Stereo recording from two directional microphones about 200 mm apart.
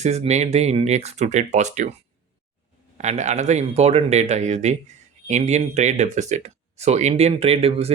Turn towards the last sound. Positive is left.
turn(degrees=-30)  # may be behind; listen again after turning